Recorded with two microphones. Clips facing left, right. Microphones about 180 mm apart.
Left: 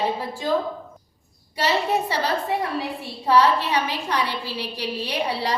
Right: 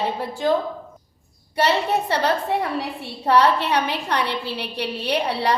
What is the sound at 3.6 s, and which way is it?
A woman's voice, 60° right (ahead or behind).